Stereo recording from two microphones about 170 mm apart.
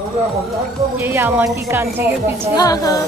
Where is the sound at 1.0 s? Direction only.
15° right (ahead or behind).